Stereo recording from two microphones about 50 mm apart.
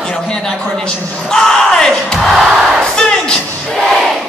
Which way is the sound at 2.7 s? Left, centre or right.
Centre.